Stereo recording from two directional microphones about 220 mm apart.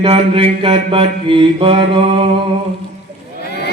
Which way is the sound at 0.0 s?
25° right (ahead or behind).